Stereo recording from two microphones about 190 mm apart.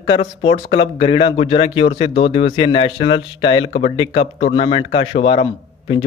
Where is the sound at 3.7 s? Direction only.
40° left (ahead or behind).